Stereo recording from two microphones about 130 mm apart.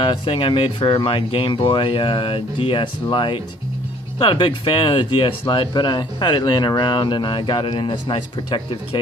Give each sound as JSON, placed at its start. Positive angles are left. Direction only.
{"t": 0.0, "sound": "speech", "side_deg": 45}